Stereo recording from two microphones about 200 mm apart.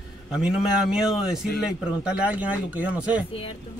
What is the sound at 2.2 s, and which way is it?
Speech, 5° right (ahead or behind).